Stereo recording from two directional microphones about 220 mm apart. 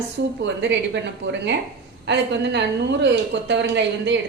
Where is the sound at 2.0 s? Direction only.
50° right (ahead or behind).